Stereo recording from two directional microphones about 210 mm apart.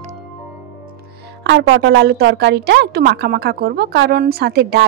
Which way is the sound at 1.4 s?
55° right (ahead or behind).